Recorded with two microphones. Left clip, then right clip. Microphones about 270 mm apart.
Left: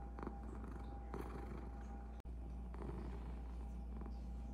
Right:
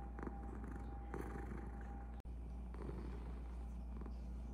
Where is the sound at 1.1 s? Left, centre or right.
Centre.